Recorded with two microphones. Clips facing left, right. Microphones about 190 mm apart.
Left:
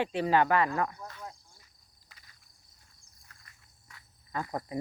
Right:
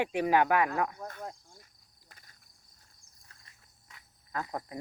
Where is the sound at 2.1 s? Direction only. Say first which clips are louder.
Right 2 dB; 50° right (ahead or behind).